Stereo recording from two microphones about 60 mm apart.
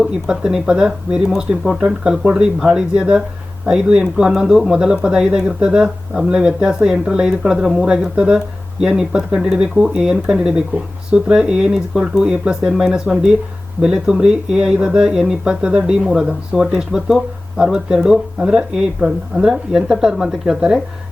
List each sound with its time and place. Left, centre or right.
0.0 s speech: centre